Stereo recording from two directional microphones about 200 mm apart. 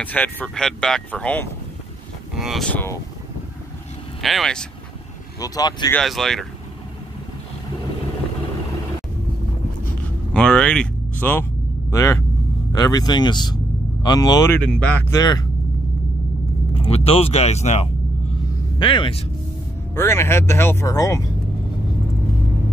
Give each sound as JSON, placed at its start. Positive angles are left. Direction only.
{"t": 0.0, "sound": "speech", "side_deg": 10}
{"t": 4.2, "sound": "speech", "side_deg": 0}
{"t": 5.4, "sound": "speech", "side_deg": 20}
{"t": 5.9, "sound": "speech", "side_deg": 0}
{"t": 10.3, "sound": "a sound", "side_deg": 5}
{"t": 11.9, "sound": "speech", "side_deg": 15}
{"t": 14.6, "sound": "speech", "side_deg": 5}
{"t": 16.7, "sound": "speech", "side_deg": 30}
{"t": 20.0, "sound": "speech", "side_deg": 10}